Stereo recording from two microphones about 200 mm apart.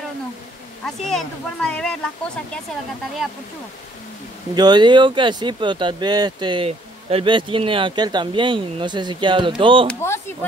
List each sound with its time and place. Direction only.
0.8 s speech: centre (ahead or behind)
4.6 s speech: 20° right (ahead or behind)
9.8 s speech: 15° left (ahead or behind)